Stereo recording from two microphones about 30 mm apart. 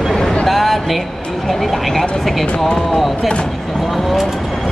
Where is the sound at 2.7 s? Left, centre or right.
Left.